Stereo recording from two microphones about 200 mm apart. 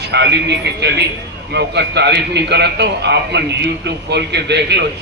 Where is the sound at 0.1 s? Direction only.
60° right (ahead or behind).